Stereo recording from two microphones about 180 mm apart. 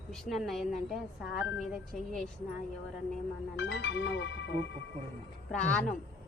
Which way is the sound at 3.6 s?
75° left (ahead or behind).